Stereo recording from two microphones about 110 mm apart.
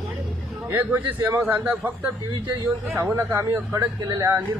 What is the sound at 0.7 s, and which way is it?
Speech, 20° right (ahead or behind).